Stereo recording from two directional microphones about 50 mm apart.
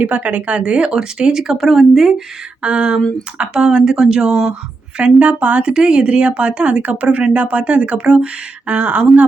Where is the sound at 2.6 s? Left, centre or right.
Right.